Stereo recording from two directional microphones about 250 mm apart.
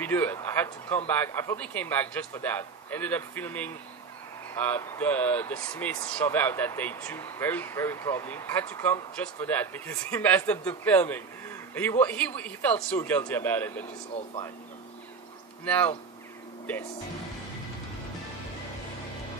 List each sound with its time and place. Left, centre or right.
0.0 s speech: centre
14.1 s speech: centre
15.6 s speech: centre